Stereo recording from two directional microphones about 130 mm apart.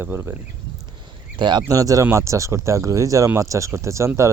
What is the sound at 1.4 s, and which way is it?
Speech, 35° right (ahead or behind).